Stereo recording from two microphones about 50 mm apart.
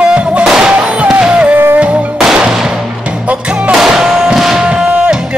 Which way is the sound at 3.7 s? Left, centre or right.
Centre.